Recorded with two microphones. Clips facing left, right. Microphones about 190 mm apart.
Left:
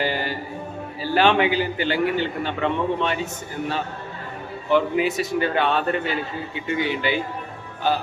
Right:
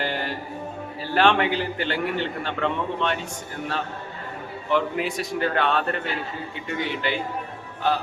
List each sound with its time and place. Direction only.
0.0 s music: centre (ahead or behind)
1.0 s a man's voice: 5° left (ahead or behind)
4.7 s a man's voice: centre (ahead or behind)